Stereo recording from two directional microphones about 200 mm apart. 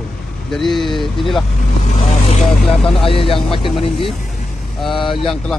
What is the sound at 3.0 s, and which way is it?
Speech, 25° left (ahead or behind).